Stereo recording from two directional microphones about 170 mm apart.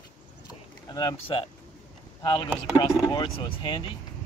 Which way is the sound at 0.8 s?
25° left (ahead or behind).